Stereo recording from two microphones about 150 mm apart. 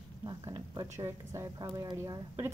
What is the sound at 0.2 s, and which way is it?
Speech, 25° right (ahead or behind).